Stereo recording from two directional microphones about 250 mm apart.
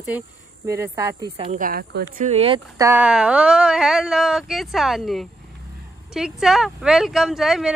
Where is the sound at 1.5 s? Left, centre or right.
Right.